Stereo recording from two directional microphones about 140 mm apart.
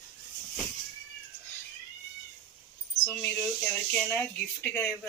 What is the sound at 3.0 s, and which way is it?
A woman's voice, 15° left (ahead or behind).